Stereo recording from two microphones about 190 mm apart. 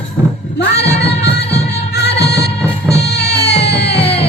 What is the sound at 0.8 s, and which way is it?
Music, 60° left (ahead or behind).